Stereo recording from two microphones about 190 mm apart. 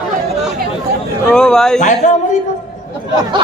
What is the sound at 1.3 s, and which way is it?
Speech, 5° left (ahead or behind).